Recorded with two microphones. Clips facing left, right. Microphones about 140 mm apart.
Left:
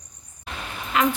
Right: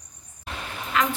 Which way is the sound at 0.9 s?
20° left (ahead or behind).